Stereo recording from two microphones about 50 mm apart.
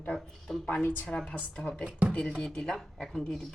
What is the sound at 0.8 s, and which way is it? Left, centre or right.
Speech, left.